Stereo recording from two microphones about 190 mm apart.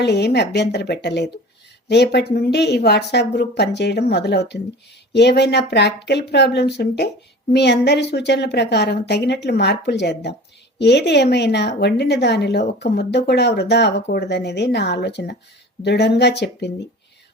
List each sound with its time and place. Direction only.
0.0 s speech: 60° left (ahead or behind)